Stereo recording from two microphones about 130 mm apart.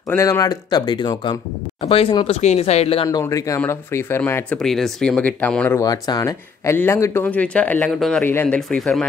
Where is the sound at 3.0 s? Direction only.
25° left (ahead or behind).